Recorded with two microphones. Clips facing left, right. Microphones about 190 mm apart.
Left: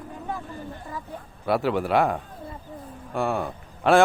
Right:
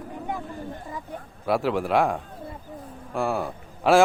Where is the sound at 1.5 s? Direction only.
Centre (ahead or behind).